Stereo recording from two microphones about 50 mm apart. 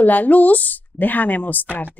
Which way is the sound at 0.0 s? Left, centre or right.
Left.